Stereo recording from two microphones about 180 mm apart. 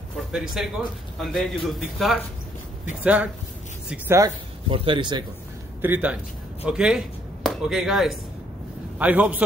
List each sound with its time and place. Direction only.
0.3 s a man's voice: centre (ahead or behind)
4.6 s speech: 30° right (ahead or behind)
5.8 s a man's voice: 10° right (ahead or behind)